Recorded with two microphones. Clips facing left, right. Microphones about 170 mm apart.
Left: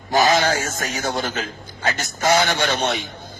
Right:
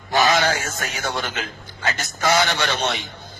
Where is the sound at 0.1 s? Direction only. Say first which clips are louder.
Left 2 dB; 40° left (ahead or behind).